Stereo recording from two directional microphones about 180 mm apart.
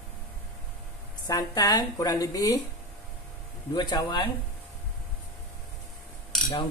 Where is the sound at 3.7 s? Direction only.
25° left (ahead or behind).